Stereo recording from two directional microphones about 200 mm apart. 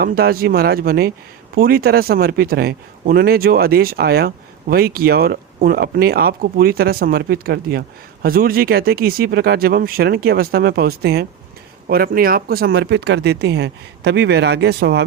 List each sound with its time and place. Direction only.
0.0 s speech: 50° right (ahead or behind)